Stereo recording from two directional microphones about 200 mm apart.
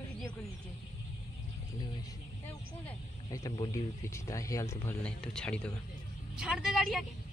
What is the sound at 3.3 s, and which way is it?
Speech, 20° left (ahead or behind).